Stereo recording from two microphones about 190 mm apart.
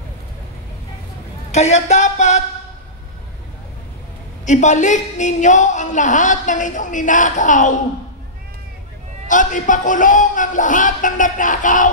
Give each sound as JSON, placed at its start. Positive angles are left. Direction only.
{"t": 1.5, "sound": "speech", "side_deg": 35}
{"t": 4.5, "sound": "speech", "side_deg": 40}
{"t": 9.3, "sound": "a man's voice", "side_deg": 40}